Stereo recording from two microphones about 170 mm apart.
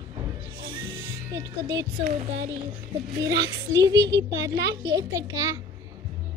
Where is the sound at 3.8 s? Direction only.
20° right (ahead or behind).